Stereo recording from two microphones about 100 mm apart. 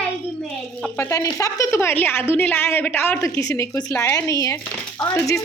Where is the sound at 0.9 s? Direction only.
30° left (ahead or behind).